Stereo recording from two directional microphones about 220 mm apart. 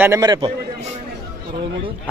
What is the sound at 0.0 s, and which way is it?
Speech, 15° right (ahead or behind).